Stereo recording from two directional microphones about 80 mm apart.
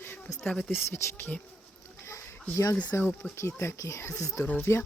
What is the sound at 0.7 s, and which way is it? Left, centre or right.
Speech, left.